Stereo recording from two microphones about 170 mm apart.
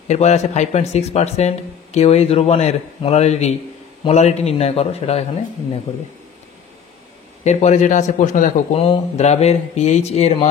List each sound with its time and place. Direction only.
0.1 s speech: 40° left (ahead or behind)
7.4 s speech: 40° left (ahead or behind)